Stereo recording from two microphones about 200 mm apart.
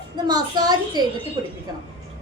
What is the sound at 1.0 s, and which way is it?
Speech, 20° right (ahead or behind).